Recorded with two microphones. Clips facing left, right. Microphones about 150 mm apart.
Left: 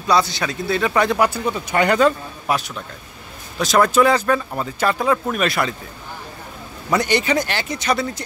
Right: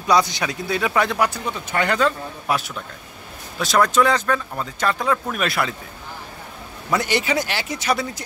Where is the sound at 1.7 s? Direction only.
15° left (ahead or behind).